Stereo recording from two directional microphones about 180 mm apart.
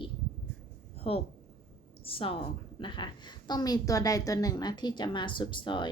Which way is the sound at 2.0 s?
30° left (ahead or behind).